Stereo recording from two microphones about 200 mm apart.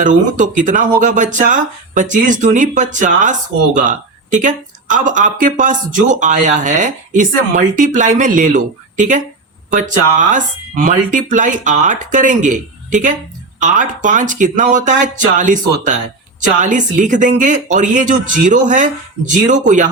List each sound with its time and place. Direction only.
0.0 s speech: 40° right (ahead or behind)